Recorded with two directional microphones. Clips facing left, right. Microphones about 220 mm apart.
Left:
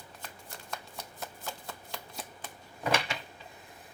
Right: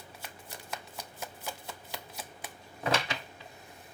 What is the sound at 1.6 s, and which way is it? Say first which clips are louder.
Shuffling cards: even; 5° right (ahead or behind).